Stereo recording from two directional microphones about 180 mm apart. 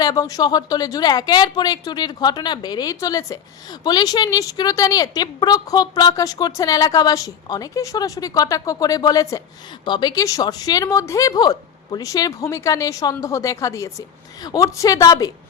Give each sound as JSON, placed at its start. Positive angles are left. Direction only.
{"t": 0.0, "sound": "a woman's voice", "side_deg": 20}